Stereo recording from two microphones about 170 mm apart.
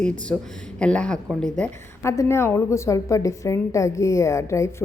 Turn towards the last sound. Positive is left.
turn(degrees=15)  # may be behind; listen again after turning